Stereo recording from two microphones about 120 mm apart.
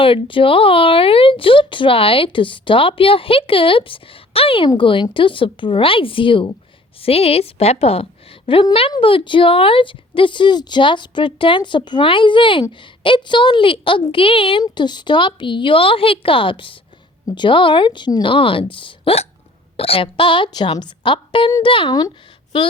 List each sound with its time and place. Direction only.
0.0 s speech: 45° left (ahead or behind)
7.0 s a woman's voice: 55° left (ahead or behind)
14.6 s speech: 40° left (ahead or behind)